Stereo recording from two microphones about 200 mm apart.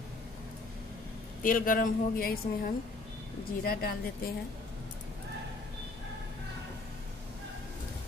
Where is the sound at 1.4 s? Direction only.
45° left (ahead or behind).